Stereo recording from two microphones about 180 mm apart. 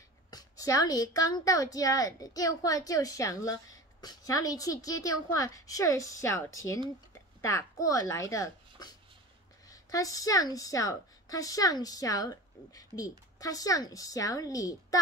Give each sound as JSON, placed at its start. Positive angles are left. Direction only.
{"t": 0.3, "sound": "a woman's voice", "side_deg": 20}